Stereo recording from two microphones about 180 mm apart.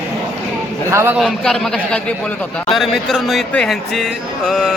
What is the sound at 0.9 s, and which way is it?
Speech, 15° right (ahead or behind).